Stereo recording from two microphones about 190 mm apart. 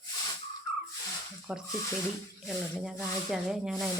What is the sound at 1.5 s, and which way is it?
Speech, 5° right (ahead or behind).